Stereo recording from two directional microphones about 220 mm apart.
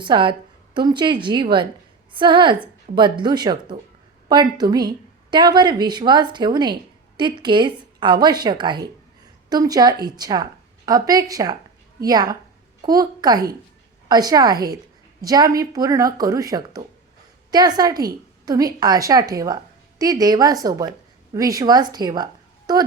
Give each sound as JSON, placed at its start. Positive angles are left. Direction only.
{"t": 0.0, "sound": "a woman's voice", "side_deg": -20}